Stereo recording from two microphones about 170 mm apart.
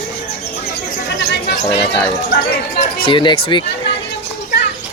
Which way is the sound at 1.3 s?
80° left.